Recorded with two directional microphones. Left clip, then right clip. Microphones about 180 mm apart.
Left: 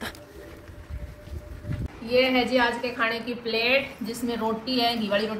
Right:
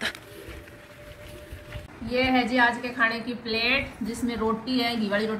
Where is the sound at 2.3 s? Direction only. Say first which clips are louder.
Right 1 dB; 40° left (ahead or behind).